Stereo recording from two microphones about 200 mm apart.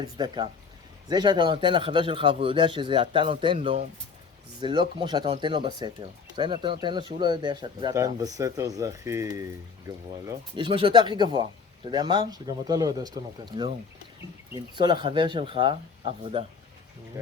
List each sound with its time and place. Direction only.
0.0 s speech: 20° right (ahead or behind)